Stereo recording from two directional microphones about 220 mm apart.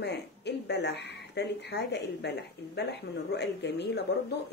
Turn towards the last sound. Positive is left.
turn(degrees=50)  # may be behind; listen again after turning